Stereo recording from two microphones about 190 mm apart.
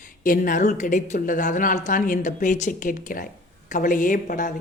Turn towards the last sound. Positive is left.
turn(degrees=45)  # may be behind; listen again after turning